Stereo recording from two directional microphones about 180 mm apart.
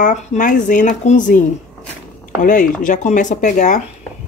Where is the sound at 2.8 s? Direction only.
45° left (ahead or behind).